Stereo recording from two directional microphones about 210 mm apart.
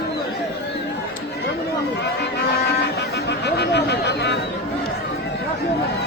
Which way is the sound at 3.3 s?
55° left (ahead or behind).